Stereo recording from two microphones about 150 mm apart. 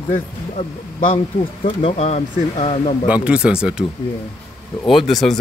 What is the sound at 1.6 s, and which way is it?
Speech, 40° left (ahead or behind).